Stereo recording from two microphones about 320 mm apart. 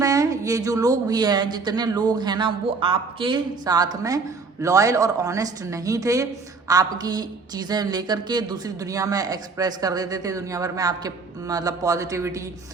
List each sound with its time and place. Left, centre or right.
0.0 s a woman's voice: centre